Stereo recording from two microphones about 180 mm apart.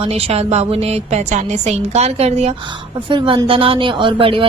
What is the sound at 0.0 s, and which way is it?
Speech, 35° right (ahead or behind).